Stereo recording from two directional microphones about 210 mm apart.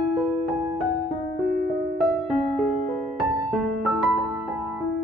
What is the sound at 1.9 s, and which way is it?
Music, centre (ahead or behind).